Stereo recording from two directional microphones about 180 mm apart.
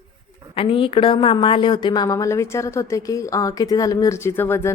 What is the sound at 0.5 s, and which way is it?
A woman's voice, 30° left (ahead or behind).